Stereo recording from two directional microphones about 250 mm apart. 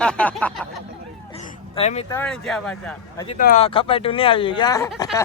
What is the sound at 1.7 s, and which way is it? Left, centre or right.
Speech, left.